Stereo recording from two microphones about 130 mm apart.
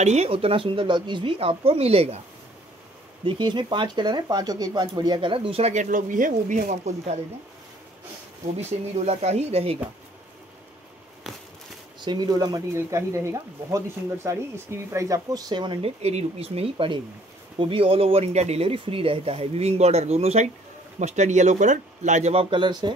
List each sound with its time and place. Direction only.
0.0 s speech: 55° right (ahead or behind)
3.3 s speech: 35° right (ahead or behind); by 7.2 s 60° right (ahead or behind)
8.5 s speech: 55° right (ahead or behind)
11.3 s a sound: centre (ahead or behind)
12.0 s speech: 35° right (ahead or behind)